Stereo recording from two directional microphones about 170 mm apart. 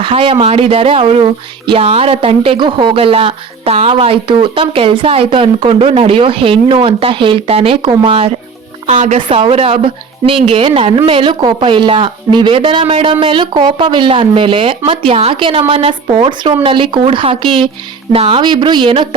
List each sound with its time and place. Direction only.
0.0 s speech: 30° right (ahead or behind)
8.9 s speech: 45° right (ahead or behind)
9.1 s a woman's voice: 30° right (ahead or behind)